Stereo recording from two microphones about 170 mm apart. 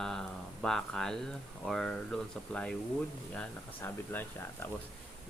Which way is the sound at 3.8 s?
15° left (ahead or behind).